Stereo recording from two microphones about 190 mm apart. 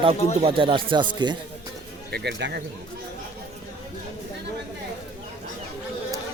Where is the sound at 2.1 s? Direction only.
60° right (ahead or behind).